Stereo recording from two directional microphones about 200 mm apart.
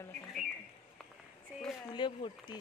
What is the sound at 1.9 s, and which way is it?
Speech, 25° left (ahead or behind).